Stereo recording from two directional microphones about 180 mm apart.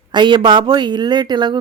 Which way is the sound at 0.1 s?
25° right (ahead or behind).